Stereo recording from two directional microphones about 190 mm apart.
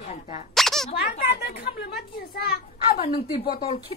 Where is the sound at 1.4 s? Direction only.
60° left (ahead or behind).